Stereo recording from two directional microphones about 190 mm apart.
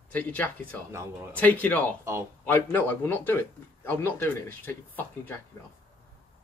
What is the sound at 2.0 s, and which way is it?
Speech, 15° right (ahead or behind).